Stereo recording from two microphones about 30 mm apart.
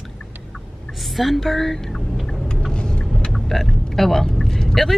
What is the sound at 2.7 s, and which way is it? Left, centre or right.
Vehicle, left.